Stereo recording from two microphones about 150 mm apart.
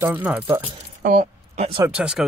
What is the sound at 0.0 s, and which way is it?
Speech, 10° right (ahead or behind).